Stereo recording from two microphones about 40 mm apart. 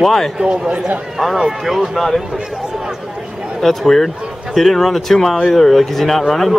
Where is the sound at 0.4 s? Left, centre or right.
Right.